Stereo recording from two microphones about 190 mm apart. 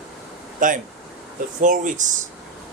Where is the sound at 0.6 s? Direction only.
45° right (ahead or behind).